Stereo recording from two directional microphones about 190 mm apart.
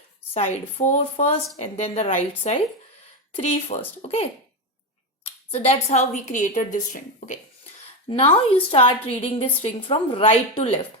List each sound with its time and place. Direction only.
0.3 s a woman's voice: 35° left (ahead or behind)
5.5 s a woman's voice: 35° left (ahead or behind)
8.2 s a woman's voice: 30° left (ahead or behind)